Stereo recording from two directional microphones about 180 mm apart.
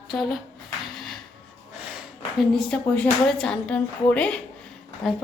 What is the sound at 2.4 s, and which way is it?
A woman's voice, centre (ahead or behind).